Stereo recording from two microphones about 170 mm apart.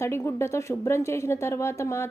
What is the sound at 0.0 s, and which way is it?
A woman's voice, 15° left (ahead or behind).